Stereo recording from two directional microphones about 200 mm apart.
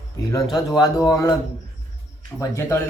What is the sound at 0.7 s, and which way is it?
Speech, 20° left (ahead or behind).